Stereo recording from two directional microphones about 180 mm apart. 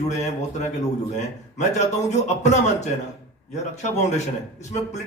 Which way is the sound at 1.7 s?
40° left (ahead or behind).